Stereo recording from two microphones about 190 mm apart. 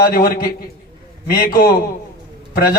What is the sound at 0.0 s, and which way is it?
A man's voice, 50° left (ahead or behind).